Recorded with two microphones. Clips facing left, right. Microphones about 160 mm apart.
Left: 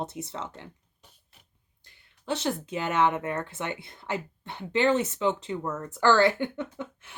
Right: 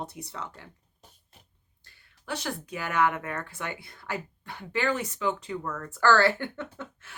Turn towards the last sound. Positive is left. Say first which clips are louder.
# left 3 dB
turn(degrees=15)  # may be behind; listen again after turning